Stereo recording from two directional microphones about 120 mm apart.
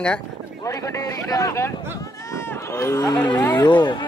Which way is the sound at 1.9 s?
25° left (ahead or behind).